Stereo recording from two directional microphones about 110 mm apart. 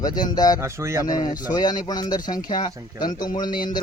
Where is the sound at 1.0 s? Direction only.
40° left (ahead or behind).